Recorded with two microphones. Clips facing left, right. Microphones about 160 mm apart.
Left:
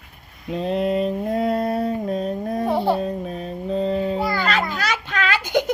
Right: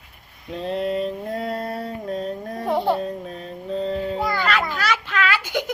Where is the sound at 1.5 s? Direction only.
20° left (ahead or behind).